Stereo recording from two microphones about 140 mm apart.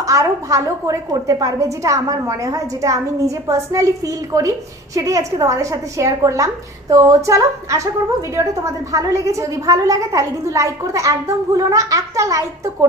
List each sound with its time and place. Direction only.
0.0 s a woman's voice: 25° right (ahead or behind)